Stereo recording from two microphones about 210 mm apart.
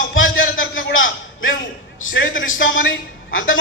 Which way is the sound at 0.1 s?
70° left (ahead or behind).